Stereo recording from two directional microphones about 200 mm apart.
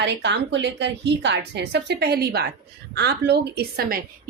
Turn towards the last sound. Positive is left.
turn(degrees=-45)  # may be behind; listen again after turning